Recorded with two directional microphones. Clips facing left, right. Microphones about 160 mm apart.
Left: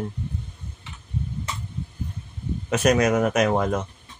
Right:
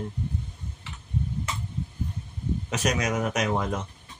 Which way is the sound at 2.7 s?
55° left (ahead or behind).